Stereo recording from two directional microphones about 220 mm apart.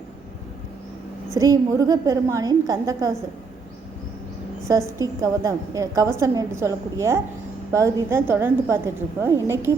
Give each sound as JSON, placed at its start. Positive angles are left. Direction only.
{"t": 1.4, "sound": "a woman's voice", "side_deg": -15}
{"t": 4.9, "sound": "a woman's voice", "side_deg": -15}